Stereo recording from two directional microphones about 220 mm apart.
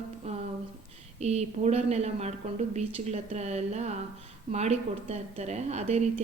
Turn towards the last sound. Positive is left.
turn(degrees=-30)  # may be behind; listen again after turning